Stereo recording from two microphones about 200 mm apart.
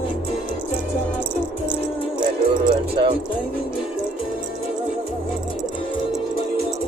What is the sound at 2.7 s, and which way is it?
Music, 25° right (ahead or behind).